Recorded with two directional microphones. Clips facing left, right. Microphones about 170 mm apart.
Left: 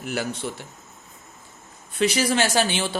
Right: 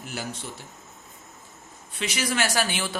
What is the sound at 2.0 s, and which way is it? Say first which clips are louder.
Speech: left 6 dB; 35° left (ahead or behind).